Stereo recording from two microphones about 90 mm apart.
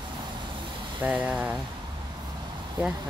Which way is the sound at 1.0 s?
15° right (ahead or behind).